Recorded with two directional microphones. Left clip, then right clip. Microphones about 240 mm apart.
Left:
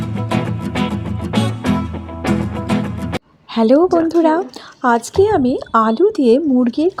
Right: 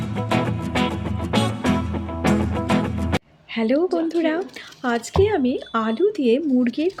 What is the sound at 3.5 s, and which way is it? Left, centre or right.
A woman's voice, left.